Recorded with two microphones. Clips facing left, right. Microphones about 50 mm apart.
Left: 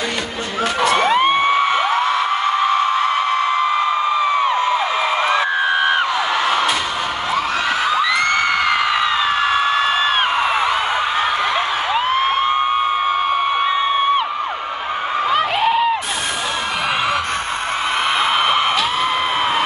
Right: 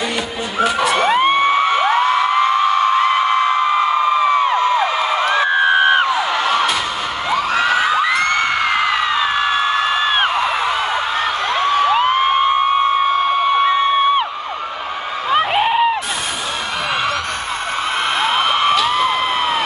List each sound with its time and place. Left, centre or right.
0.7 s music: centre
15.3 s a sound: centre
18.2 s music: centre